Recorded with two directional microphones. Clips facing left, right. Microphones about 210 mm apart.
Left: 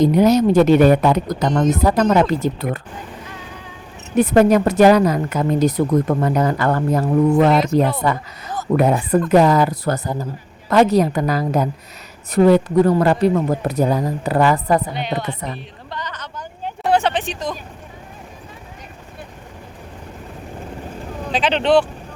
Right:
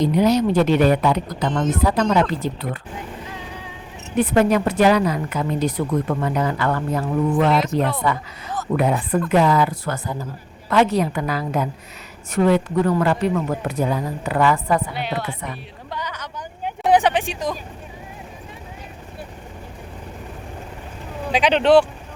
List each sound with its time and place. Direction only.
0.0 s speech: 45° left (ahead or behind)
4.2 s speech: 40° left (ahead or behind)
7.6 s a woman's voice: centre (ahead or behind)
8.0 s speech: 45° left (ahead or behind)
14.9 s a woman's voice: 5° right (ahead or behind)
15.9 s vehicle: 10° right (ahead or behind)
21.3 s speech: 10° right (ahead or behind)